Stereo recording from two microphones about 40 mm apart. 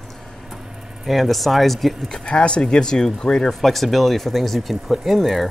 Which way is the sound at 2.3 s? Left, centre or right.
Left.